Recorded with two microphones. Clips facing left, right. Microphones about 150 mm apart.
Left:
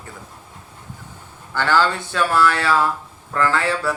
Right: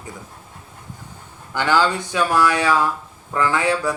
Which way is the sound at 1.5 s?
15° right (ahead or behind).